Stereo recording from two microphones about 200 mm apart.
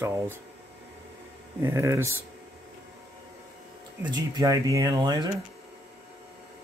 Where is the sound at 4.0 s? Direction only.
20° right (ahead or behind).